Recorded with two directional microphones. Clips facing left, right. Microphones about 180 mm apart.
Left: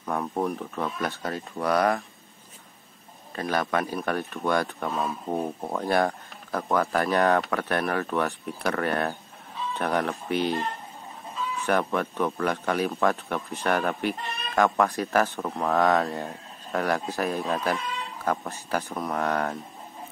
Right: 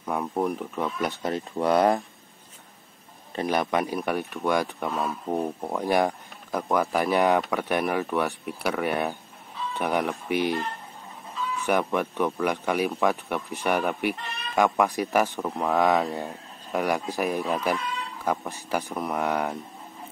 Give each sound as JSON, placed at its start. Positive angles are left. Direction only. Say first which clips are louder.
{"t": 0.0, "sound": "speech", "louder": "right 1 dB", "side_deg": -5}
{"t": 3.3, "sound": "speech", "louder": "right 2 dB", "side_deg": -20}
{"t": 5.3, "sound": "speech", "louder": "right 2 dB", "side_deg": 0}
{"t": 5.8, "sound": "speech", "louder": "right 1 dB", "side_deg": -15}
{"t": 11.5, "sound": "chicken", "louder": "right 1 dB", "side_deg": -15}
{"t": 11.9, "sound": "speech", "louder": "right 1 dB", "side_deg": -15}